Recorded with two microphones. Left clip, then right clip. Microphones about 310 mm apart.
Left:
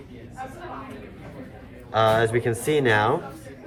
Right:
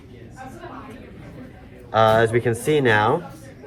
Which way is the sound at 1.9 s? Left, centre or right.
Centre.